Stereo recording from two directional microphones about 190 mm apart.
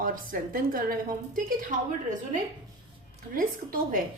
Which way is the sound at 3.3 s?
45° right (ahead or behind).